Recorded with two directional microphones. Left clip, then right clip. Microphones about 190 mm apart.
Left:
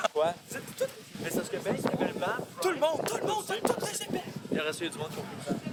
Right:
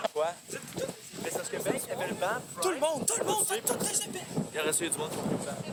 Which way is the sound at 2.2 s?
35° right (ahead or behind).